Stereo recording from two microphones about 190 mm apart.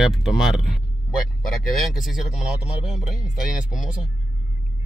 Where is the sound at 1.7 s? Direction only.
Centre (ahead or behind).